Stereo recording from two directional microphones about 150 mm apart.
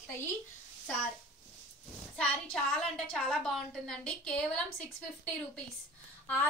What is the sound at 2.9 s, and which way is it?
A woman's voice, 5° left (ahead or behind).